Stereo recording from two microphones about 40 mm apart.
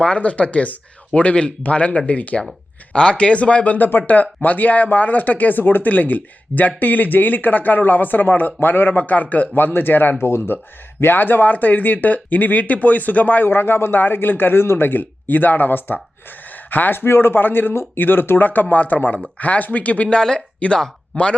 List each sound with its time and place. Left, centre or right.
0.0 s speech: left
3.8 s speech: left
8.6 s a man's voice: left
9.0 s speech: left
9.6 s a man's voice: left
10.2 s speech: left
11.0 s speech: left
13.5 s a man's voice: left
14.0 s a man's voice: left
16.5 s a sound: left
17.0 s a man's voice: left
18.4 s speech: left